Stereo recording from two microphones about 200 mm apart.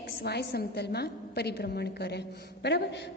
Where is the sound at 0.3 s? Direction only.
55° left (ahead or behind).